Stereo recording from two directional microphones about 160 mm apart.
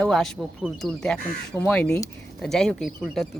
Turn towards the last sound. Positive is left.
turn(degrees=0)  # may be behind; listen again after turning